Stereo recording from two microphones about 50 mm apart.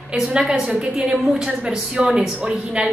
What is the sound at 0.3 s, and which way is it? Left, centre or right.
A woman's voice, centre.